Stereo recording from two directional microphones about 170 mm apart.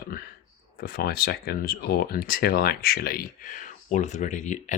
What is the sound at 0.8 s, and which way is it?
Speech, 65° left (ahead or behind).